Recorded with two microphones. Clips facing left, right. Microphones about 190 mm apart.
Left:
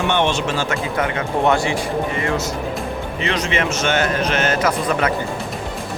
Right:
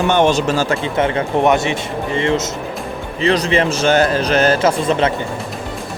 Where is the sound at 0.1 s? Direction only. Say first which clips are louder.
Right 7 dB; 40° right (ahead or behind).